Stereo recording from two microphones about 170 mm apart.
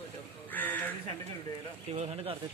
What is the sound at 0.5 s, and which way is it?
Crow, 10° left (ahead or behind).